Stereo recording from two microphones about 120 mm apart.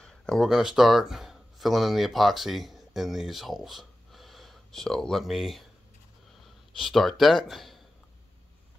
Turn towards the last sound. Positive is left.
turn(degrees=0)  # may be behind; listen again after turning